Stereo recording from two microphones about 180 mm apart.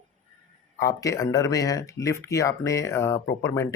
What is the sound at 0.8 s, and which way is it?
Speech, 15° left (ahead or behind).